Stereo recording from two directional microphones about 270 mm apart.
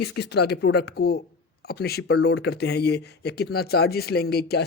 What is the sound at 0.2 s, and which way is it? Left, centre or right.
Speech, left.